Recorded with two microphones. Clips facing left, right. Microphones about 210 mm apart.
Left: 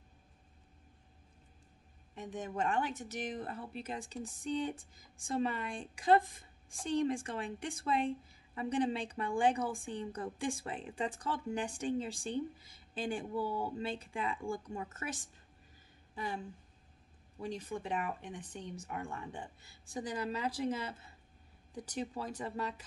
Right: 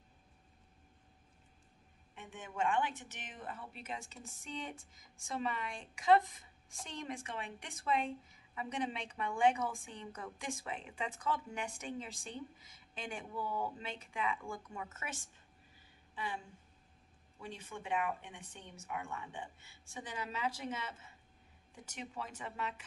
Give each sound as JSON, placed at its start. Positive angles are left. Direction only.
{"t": 2.1, "sound": "speech", "side_deg": 40}
{"t": 17.4, "sound": "speech", "side_deg": 35}